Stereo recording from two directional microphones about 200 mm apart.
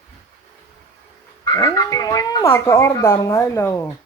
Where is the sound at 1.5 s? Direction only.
15° left (ahead or behind).